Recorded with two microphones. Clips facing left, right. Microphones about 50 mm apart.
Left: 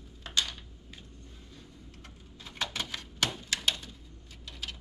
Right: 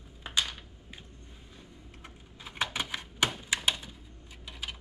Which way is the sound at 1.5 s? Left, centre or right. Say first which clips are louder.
Right 1 dB; centre.